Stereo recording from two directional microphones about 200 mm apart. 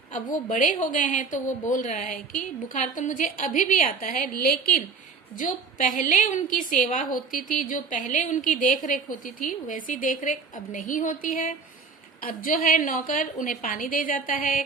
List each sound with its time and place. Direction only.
0.1 s a woman's voice: 40° left (ahead or behind)